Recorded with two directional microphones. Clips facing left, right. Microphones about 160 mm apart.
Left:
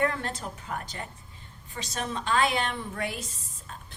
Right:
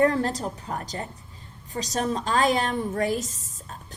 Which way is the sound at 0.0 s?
35° right (ahead or behind).